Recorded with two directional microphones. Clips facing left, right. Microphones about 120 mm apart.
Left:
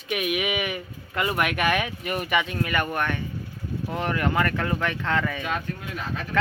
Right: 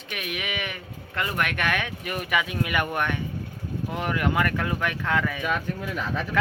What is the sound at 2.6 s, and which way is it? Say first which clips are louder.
Speech: even; 15° right (ahead or behind).